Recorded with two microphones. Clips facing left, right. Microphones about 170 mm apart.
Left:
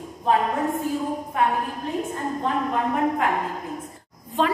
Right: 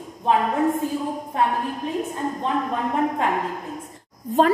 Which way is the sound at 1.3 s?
30° right (ahead or behind).